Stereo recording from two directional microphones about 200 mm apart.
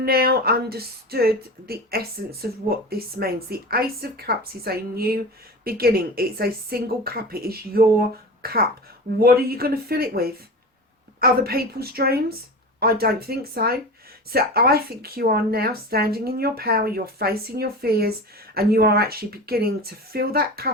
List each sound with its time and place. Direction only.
0.0 s speech: 50° right (ahead or behind)